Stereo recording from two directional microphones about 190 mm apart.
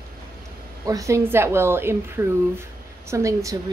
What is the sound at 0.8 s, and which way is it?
A woman's voice, 15° right (ahead or behind).